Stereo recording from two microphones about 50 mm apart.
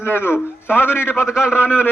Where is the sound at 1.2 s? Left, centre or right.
Centre.